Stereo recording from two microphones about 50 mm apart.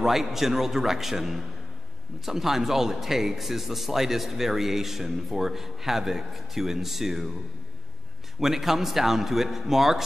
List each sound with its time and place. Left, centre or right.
0.0 s speech: centre
8.4 s speech: centre